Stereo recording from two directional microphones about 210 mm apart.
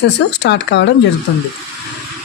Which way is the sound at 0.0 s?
55° left (ahead or behind).